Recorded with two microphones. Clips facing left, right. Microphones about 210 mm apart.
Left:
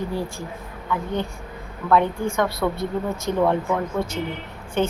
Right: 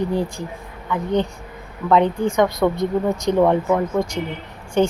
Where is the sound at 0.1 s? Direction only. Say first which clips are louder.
Right 5 dB; 15° right (ahead or behind).